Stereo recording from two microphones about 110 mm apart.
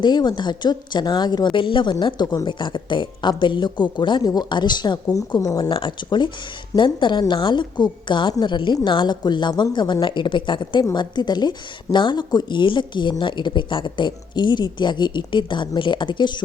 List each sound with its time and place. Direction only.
0.0 s a woman's voice: 40° left (ahead or behind)